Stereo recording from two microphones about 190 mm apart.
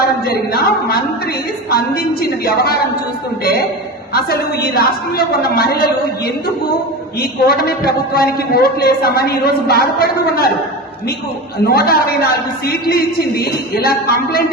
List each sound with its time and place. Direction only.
0.0 s a woman's voice: 55° left (ahead or behind)
4.1 s a man's voice: 55° left (ahead or behind)
11.6 s a man's voice: 55° left (ahead or behind)